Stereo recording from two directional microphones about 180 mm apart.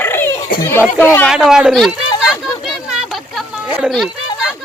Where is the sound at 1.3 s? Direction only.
5° right (ahead or behind).